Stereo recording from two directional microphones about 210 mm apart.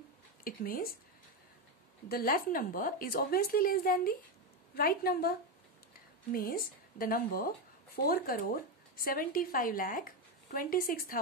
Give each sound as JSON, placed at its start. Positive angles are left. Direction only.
{"t": 0.4, "sound": "speech", "side_deg": 45}
{"t": 2.0, "sound": "a woman's voice", "side_deg": 45}
{"t": 6.3, "sound": "a woman's voice", "side_deg": 45}